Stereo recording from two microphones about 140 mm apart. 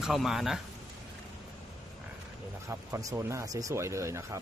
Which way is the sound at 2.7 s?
20° right (ahead or behind).